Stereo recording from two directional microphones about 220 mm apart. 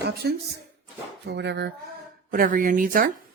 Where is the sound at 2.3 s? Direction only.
40° right (ahead or behind).